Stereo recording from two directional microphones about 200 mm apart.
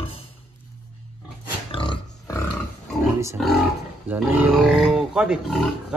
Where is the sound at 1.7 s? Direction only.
25° left (ahead or behind).